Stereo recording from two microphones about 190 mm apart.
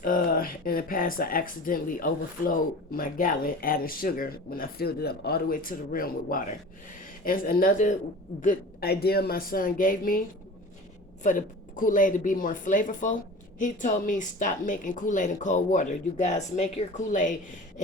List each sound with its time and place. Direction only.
0.0 s speech: 45° left (ahead or behind)